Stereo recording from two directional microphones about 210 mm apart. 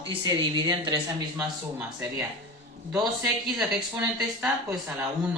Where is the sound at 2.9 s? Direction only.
Centre (ahead or behind).